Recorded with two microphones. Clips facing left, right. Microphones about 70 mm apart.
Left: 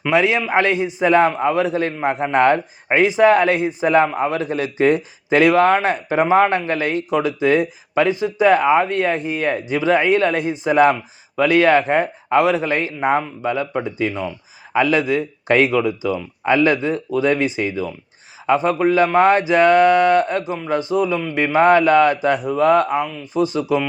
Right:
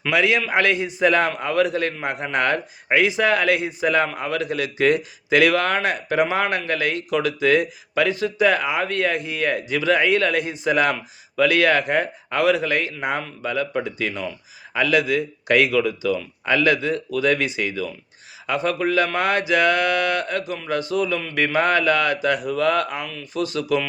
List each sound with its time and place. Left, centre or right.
0.0 s a man's voice: left